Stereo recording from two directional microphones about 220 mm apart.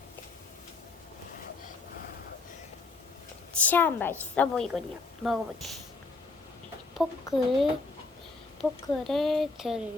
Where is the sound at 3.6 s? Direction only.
10° left (ahead or behind).